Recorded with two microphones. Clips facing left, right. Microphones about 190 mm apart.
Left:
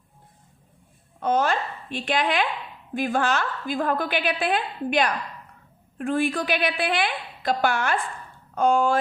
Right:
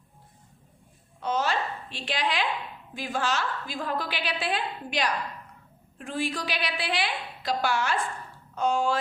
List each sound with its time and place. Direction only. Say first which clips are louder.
1.2 s a woman's voice: left 5 dB; 50° left (ahead or behind)